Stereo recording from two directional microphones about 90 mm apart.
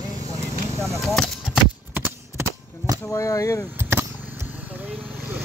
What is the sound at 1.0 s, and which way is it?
Speech, centre (ahead or behind).